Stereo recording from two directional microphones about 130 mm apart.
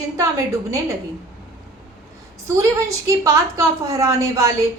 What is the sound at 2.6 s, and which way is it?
A woman's voice, 25° right (ahead or behind).